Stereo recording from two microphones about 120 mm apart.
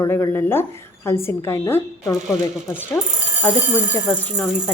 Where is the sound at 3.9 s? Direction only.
20° left (ahead or behind).